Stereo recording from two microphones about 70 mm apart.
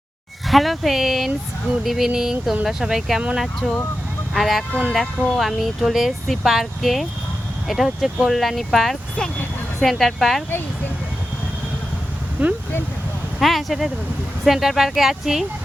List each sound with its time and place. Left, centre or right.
0.4 s speech: centre
1.8 s a sound: centre
3.3 s speech: centre
12.4 s speech: right
13.4 s speech: centre